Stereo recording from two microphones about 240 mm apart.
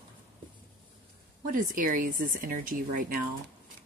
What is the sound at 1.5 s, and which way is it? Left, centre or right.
Speech, right.